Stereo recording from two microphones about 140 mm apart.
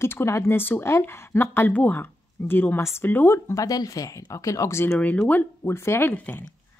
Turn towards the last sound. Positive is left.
turn(degrees=15)  # may be behind; listen again after turning